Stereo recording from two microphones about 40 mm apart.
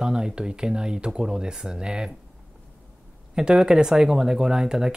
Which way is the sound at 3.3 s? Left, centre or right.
Centre.